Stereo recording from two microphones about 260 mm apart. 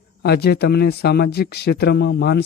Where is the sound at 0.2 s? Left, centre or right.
Left.